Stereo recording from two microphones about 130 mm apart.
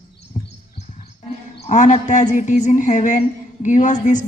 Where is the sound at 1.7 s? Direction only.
65° left (ahead or behind).